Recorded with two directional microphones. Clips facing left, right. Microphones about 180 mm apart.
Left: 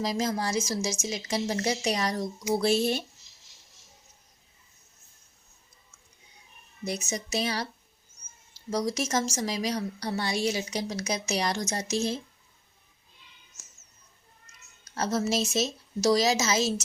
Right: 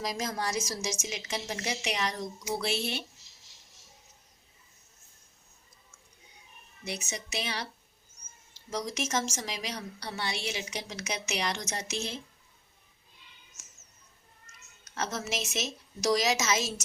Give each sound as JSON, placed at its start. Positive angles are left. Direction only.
{"t": 0.0, "sound": "a woman's voice", "side_deg": 30}
{"t": 6.8, "sound": "a woman's voice", "side_deg": 40}
{"t": 8.7, "sound": "a woman's voice", "side_deg": 35}
{"t": 14.8, "sound": "a woman's voice", "side_deg": 35}